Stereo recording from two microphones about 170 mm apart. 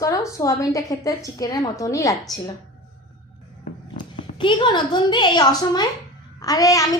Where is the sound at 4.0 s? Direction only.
25° left (ahead or behind).